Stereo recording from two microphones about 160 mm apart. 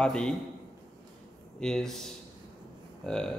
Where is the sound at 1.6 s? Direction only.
5° left (ahead or behind).